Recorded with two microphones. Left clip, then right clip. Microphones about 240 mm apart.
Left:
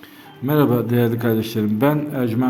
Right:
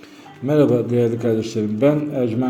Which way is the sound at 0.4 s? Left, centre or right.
Left.